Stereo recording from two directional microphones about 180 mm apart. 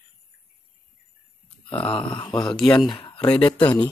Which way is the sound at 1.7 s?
30° left (ahead or behind).